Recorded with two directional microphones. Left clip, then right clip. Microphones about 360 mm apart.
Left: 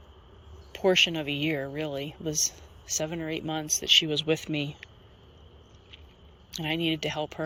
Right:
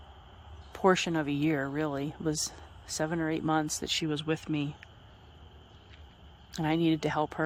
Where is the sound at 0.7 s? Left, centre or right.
Centre.